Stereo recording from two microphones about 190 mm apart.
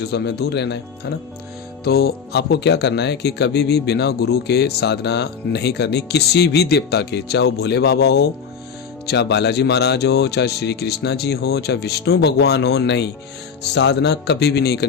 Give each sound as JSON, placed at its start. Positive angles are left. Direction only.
{"t": 0.1, "sound": "speech", "side_deg": 60}
{"t": 1.8, "sound": "speech", "side_deg": 55}